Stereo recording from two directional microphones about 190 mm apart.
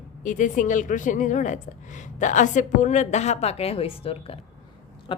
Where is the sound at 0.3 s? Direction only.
45° left (ahead or behind).